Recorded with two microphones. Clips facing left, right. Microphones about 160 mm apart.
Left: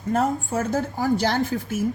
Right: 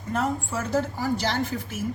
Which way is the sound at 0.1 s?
50° left (ahead or behind).